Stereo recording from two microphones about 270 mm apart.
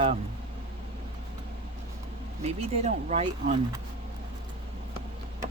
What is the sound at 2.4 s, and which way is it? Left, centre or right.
Speech, right.